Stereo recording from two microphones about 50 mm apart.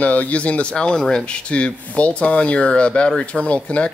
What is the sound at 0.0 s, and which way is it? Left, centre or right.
Speech, left.